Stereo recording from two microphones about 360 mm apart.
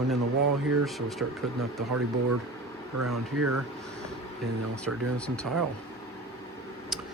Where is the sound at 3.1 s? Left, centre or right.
Right.